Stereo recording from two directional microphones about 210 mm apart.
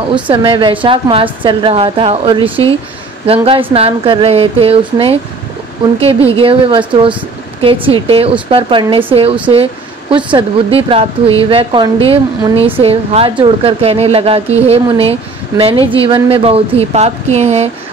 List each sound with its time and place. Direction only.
0.3 s speech: 25° right (ahead or behind)
6.4 s speech: 25° right (ahead or behind)